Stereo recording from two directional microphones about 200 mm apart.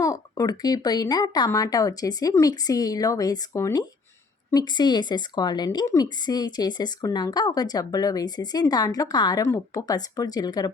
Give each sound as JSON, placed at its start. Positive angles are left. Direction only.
{"t": 0.0, "sound": "a woman's voice", "side_deg": 15}